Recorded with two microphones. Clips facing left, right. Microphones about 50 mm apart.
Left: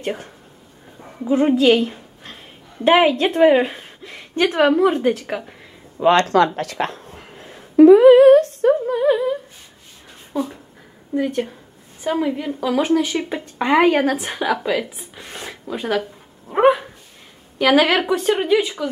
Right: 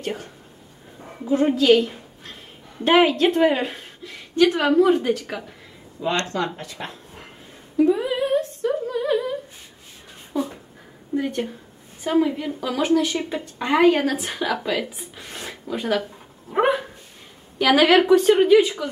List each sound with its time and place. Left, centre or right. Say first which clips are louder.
0.0 s speech: left 3 dB; centre
1.3 s a woman's voice: left 2 dB; centre
4.0 s a sound: right 1 dB; left
4.6 s speech: left 2 dB; left
4.8 s speech: left 2 dB; centre
5.9 s speech: left 9 dB; left
6.3 s a sound: left 10 dB; left
8.8 s a sound: left 5 dB; centre
11.1 s a woman's voice: left 3 dB; centre
13.6 s speech: left 2 dB; left; by 16.0 s centre
16.5 s dog: left 5 dB; centre
17.6 s a woman's voice: even; centre